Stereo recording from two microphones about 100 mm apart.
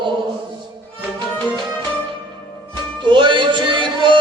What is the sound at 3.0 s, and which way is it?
Music, 55° right (ahead or behind).